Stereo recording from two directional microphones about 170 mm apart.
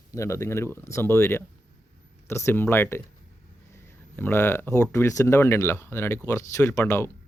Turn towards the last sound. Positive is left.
turn(degrees=15)  # may be behind; listen again after turning